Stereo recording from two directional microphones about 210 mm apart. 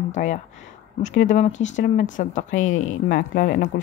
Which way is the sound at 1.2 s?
35° left (ahead or behind).